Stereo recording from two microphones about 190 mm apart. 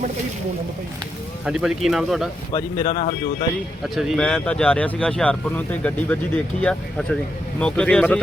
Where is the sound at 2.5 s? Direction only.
20° left (ahead or behind).